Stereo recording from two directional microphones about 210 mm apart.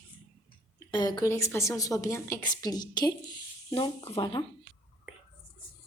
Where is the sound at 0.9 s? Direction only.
20° left (ahead or behind).